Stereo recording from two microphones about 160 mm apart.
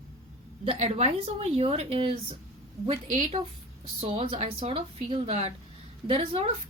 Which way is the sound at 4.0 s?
40° right (ahead or behind).